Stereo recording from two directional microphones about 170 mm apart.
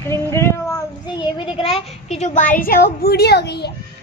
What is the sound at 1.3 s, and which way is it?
A woman's voice, 30° left (ahead or behind).